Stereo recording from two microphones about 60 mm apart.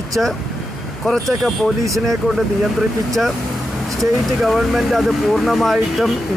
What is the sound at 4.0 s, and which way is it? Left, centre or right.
Speech, centre.